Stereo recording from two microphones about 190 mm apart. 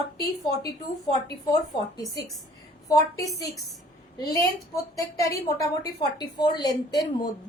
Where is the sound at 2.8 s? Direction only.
15° left (ahead or behind).